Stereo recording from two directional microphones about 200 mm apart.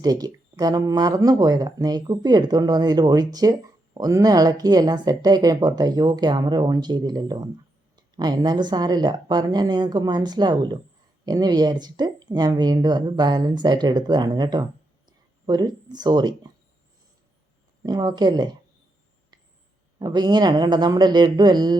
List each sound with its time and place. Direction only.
0.0 s speech: 20° right (ahead or behind)
17.8 s speech: 20° right (ahead or behind)
20.0 s speech: 20° right (ahead or behind)